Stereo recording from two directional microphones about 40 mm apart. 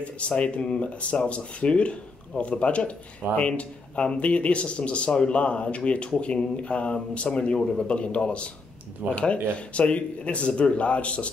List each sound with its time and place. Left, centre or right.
0.4 s speech: left